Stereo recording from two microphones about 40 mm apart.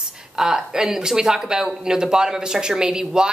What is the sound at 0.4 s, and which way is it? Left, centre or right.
Speech, centre.